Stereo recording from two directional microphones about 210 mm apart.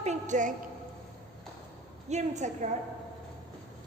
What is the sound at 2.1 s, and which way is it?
Speech, 35° right (ahead or behind).